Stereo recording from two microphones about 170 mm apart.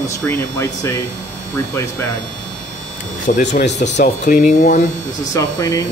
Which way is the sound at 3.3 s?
45° left (ahead or behind).